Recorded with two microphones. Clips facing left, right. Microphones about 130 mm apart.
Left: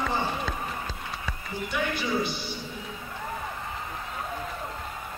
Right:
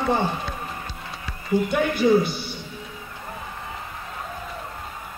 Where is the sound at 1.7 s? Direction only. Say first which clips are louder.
Right 8 dB; 50° right (ahead or behind).